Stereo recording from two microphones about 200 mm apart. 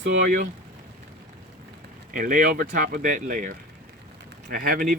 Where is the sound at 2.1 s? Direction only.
45° right (ahead or behind).